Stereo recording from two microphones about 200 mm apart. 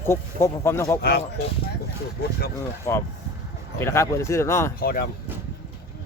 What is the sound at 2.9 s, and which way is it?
Speech, 15° left (ahead or behind).